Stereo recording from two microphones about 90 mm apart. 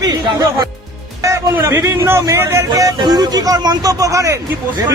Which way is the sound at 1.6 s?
35° right (ahead or behind).